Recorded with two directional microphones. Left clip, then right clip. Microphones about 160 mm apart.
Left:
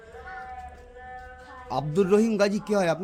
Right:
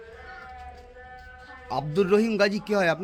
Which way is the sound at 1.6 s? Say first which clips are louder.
Even; 15° left (ahead or behind).